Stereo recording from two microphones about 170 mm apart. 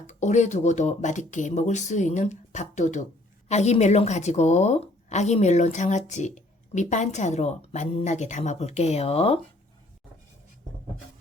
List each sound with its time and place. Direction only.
0.1 s a woman's voice: 45° left (ahead or behind)